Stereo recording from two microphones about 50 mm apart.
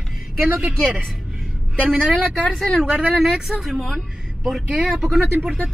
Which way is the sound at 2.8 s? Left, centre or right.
Centre.